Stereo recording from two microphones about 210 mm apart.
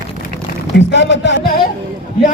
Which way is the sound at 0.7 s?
55° left (ahead or behind).